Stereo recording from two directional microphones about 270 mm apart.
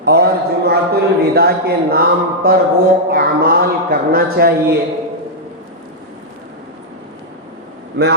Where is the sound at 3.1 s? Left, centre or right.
Right.